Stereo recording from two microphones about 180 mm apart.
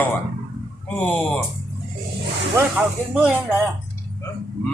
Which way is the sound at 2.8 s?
10° right (ahead or behind).